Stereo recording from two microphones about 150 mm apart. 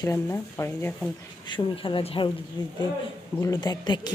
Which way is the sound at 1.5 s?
35° left (ahead or behind).